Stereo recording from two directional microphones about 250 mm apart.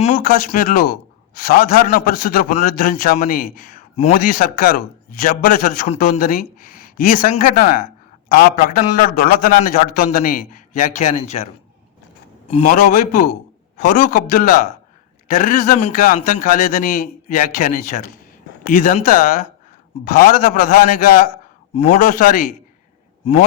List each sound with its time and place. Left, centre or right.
0.0 s a man's voice: left
12.5 s a man's voice: left